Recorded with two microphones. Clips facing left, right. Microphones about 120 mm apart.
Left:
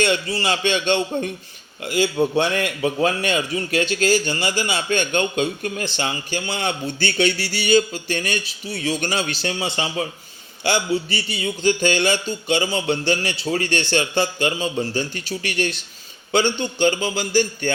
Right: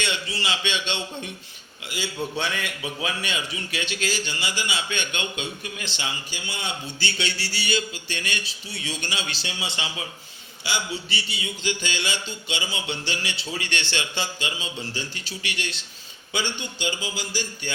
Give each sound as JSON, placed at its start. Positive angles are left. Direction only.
{"t": 0.0, "sound": "a man's voice", "side_deg": 45}